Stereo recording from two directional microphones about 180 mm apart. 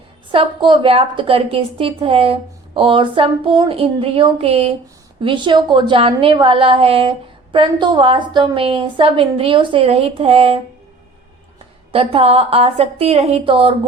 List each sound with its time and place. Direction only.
0.3 s a woman's voice: 30° right (ahead or behind)
11.9 s a woman's voice: 30° right (ahead or behind)